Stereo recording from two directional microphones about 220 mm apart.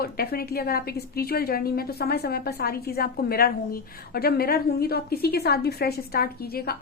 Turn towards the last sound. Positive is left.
turn(degrees=45)  # may be behind; listen again after turning